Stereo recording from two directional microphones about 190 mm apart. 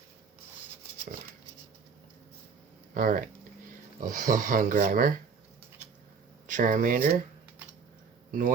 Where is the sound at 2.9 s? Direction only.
45° right (ahead or behind).